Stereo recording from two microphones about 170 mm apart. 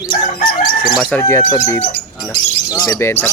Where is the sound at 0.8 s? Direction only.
25° left (ahead or behind).